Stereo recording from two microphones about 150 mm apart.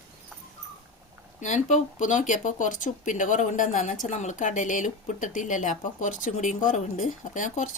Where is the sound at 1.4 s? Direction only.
55° left (ahead or behind).